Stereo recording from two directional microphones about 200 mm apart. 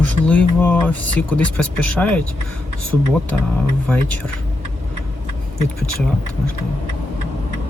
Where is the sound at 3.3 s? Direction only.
5° left (ahead or behind).